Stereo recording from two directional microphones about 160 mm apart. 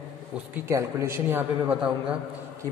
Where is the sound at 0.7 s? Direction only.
15° right (ahead or behind).